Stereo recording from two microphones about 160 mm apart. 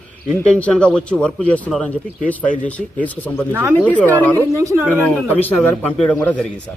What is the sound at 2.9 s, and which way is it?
A man's voice, 10° left (ahead or behind).